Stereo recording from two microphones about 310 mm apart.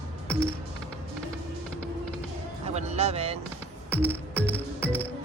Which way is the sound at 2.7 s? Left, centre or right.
Right.